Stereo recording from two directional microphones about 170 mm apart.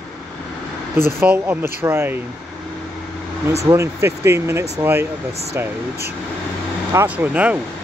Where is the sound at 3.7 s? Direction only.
15° right (ahead or behind).